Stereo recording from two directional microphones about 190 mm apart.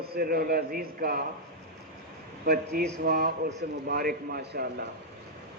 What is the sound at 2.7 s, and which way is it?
A man's voice, 50° right (ahead or behind).